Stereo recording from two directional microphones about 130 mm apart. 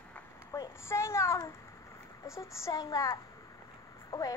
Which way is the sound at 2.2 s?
20° left (ahead or behind).